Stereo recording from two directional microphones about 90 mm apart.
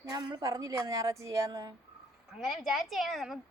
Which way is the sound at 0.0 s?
50° right (ahead or behind).